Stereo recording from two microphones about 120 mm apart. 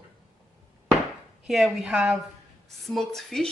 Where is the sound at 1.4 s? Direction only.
5° right (ahead or behind).